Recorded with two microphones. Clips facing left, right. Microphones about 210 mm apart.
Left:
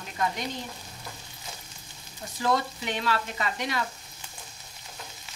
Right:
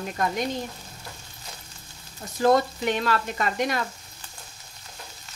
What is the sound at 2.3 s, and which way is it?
Speech, 45° right (ahead or behind).